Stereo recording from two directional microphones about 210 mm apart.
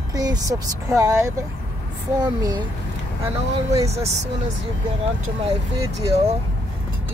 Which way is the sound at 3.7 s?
15° right (ahead or behind).